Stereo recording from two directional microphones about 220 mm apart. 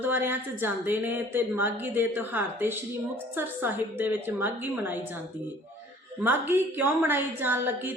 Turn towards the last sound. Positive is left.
turn(degrees=-10)  # may be behind; listen again after turning